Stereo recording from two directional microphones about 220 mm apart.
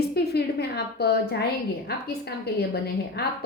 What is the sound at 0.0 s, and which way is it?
A woman's voice, 45° left (ahead or behind).